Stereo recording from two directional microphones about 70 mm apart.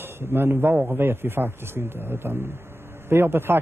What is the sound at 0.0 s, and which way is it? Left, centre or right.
Speech, right.